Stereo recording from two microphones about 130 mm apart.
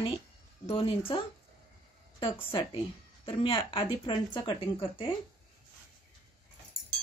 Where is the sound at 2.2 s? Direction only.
40° left (ahead or behind).